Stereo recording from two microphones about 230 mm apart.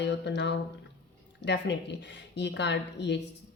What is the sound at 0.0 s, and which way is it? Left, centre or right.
Speech, left.